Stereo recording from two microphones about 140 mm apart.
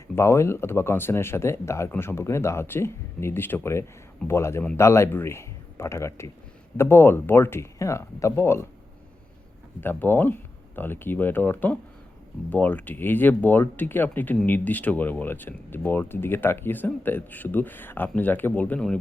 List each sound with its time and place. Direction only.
0.2 s speech: 20° left (ahead or behind)
9.8 s speech: 15° left (ahead or behind)